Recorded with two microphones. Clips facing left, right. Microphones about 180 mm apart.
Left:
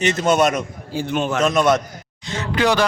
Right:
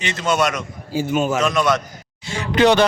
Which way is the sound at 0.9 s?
5° right (ahead or behind).